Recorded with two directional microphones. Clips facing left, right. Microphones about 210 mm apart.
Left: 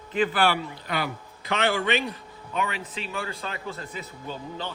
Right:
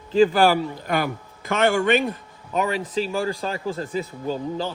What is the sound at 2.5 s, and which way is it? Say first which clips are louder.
Speech: right 7 dB; 40° right (ahead or behind).